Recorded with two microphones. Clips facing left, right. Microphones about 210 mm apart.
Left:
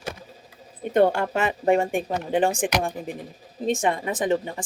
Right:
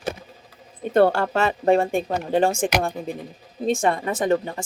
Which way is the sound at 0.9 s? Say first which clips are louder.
Right 2 dB; 20° left (ahead or behind).